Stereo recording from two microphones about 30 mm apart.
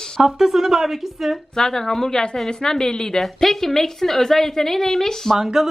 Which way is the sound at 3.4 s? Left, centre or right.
Centre.